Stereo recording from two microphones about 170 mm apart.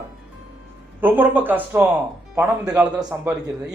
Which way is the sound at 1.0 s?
10° right (ahead or behind).